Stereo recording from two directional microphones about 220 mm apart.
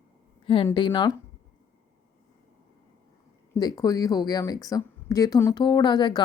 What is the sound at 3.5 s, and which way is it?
Speech, 15° left (ahead or behind).